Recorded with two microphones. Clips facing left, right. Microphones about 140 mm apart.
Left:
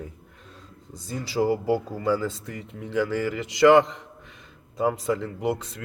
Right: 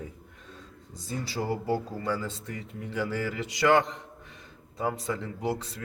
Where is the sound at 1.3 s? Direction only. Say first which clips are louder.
Left 10 dB; 90° left.